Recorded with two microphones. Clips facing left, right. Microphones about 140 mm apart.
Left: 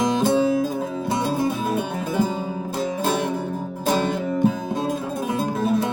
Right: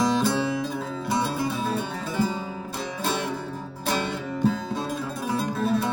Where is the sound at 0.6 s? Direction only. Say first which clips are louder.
Left 5 dB; 45° left (ahead or behind).